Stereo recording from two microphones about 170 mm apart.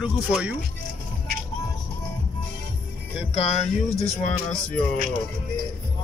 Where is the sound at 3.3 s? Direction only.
40° left (ahead or behind).